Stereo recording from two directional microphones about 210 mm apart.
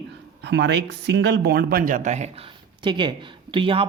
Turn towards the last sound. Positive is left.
turn(degrees=-25)  # may be behind; listen again after turning